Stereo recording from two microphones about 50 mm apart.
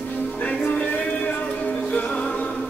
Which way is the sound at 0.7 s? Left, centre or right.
Left.